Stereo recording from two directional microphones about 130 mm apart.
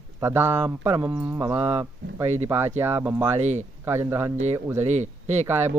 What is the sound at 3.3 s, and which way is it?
Mantra, 60° right (ahead or behind).